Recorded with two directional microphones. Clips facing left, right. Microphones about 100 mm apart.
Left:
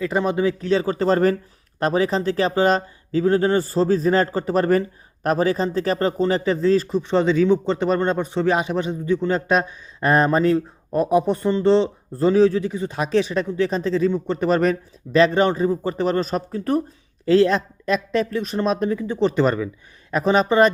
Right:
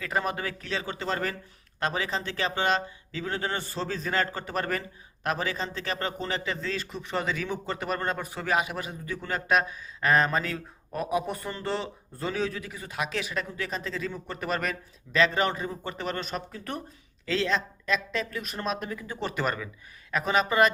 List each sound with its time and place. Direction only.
0.0 s speech: 25° left (ahead or behind)
0.7 s speech: 35° left (ahead or behind)